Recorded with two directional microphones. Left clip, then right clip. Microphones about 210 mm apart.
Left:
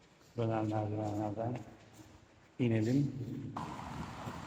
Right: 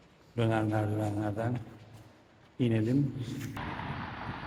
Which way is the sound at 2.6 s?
10° left (ahead or behind).